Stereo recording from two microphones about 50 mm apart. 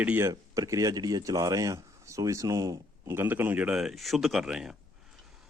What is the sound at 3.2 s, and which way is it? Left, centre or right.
Speech, right.